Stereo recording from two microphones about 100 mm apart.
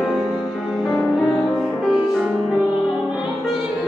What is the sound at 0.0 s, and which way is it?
Music, centre (ahead or behind).